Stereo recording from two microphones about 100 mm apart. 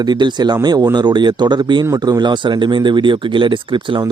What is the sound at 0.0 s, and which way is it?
Speech, 45° right (ahead or behind).